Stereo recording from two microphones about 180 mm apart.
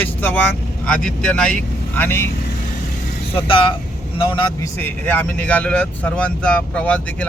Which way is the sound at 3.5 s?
30° left (ahead or behind).